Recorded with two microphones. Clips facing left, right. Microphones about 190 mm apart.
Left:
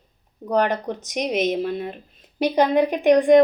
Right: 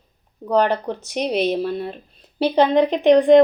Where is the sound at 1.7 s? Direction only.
15° left (ahead or behind).